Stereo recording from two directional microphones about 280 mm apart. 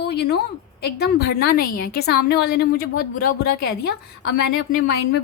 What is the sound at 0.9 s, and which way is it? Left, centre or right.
A woman's voice, left.